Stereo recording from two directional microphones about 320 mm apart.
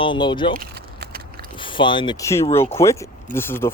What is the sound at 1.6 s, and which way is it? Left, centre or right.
Speech, centre.